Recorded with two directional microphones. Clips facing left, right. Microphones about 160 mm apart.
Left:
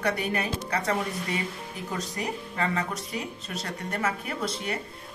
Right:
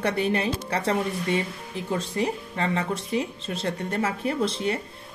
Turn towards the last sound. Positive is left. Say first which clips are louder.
# right 6 dB
turn(degrees=-30)  # may be behind; listen again after turning